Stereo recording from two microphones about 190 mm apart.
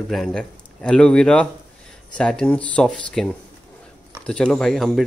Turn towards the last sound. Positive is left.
turn(degrees=0)  # may be behind; listen again after turning